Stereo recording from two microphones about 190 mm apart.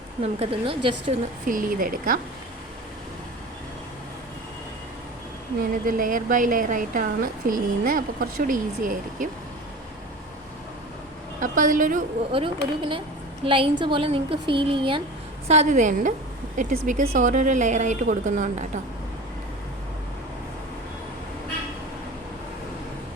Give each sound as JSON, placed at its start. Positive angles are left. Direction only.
{"t": 0.2, "sound": "a woman's voice", "side_deg": -30}
{"t": 1.5, "sound": "speech", "side_deg": -45}
{"t": 5.8, "sound": "speech", "side_deg": -45}
{"t": 11.3, "sound": "speech", "side_deg": -45}
{"t": 12.3, "sound": "a woman's voice", "side_deg": -25}
{"t": 15.4, "sound": "a woman's voice", "side_deg": -40}